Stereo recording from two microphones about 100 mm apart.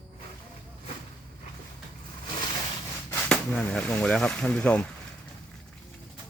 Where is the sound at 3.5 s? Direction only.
10° left (ahead or behind).